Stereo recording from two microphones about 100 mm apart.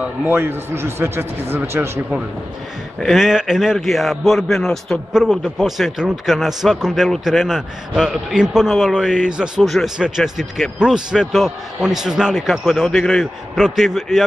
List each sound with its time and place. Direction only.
0.0 s a man's voice: 20° right (ahead or behind)
3.0 s a man's voice: centre (ahead or behind)
5.1 s a man's voice: 5° right (ahead or behind)